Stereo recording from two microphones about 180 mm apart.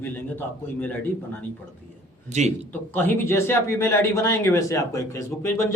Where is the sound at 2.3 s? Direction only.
40° right (ahead or behind).